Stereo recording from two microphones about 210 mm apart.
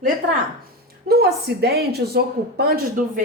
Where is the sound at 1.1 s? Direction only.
50° right (ahead or behind).